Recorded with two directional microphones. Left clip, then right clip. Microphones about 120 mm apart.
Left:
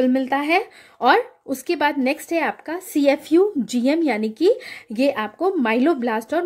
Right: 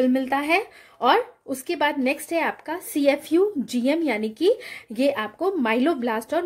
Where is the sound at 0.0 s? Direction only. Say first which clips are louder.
Left 2 dB; 40° left (ahead or behind).